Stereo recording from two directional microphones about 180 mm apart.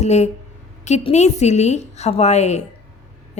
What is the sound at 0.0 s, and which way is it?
A woman's voice, 40° left (ahead or behind).